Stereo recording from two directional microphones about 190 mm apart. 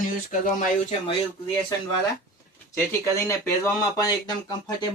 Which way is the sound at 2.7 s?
15° left (ahead or behind).